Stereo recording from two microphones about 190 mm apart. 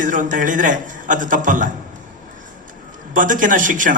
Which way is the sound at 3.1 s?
45° right (ahead or behind).